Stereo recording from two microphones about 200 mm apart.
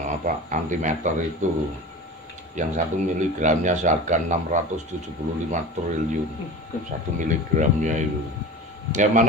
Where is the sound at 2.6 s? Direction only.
40° right (ahead or behind).